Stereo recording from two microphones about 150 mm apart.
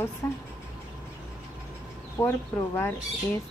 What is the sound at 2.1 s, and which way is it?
Speech, 15° left (ahead or behind).